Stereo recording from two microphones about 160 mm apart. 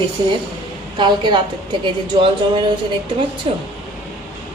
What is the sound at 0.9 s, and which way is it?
A woman's voice, 30° right (ahead or behind).